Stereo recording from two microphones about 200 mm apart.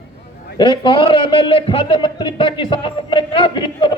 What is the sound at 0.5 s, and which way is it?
A man's voice, 25° left (ahead or behind).